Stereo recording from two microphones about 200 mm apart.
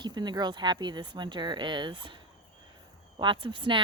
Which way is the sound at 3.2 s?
25° right (ahead or behind).